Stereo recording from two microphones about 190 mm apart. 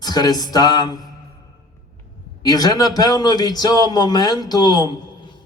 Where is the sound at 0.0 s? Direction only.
20° left (ahead or behind).